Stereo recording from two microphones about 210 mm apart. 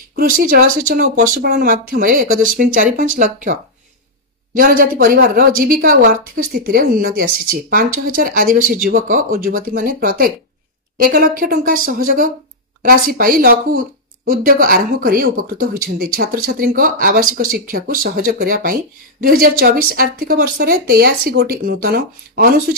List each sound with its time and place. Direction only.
0.1 s speech: 40° right (ahead or behind)
4.6 s a woman's voice: 40° right (ahead or behind)